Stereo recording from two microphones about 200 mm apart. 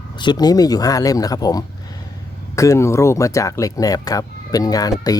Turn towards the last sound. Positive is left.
turn(degrees=20)  # may be behind; listen again after turning